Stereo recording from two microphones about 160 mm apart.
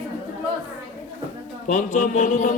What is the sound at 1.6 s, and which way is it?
Mantra, 50° left (ahead or behind).